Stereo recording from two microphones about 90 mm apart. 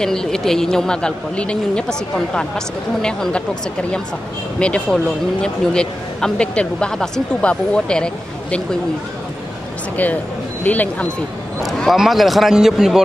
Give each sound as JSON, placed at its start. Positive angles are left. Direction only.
{"t": 0.0, "sound": "a man's voice", "side_deg": 5}
{"t": 4.6, "sound": "a man's voice", "side_deg": 10}
{"t": 10.6, "sound": "a man's voice", "side_deg": 20}
{"t": 11.6, "sound": "a man's voice", "side_deg": 0}